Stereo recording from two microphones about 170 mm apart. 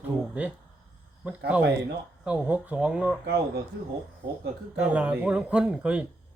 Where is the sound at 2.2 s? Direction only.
10° right (ahead or behind).